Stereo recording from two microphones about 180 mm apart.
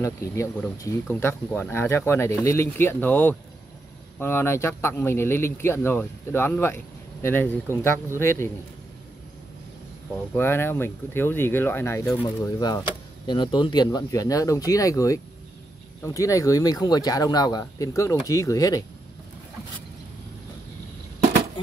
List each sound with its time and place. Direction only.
0.0 s speech: 15° left (ahead or behind)
10.3 s speech: 10° left (ahead or behind)